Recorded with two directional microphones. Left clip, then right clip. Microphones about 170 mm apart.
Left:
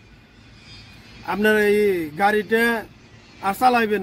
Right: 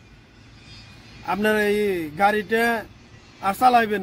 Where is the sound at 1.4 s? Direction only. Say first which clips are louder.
Left 4 dB; 40° right (ahead or behind).